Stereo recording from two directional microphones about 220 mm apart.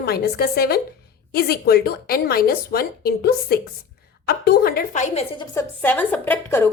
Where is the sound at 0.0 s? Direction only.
45° left (ahead or behind).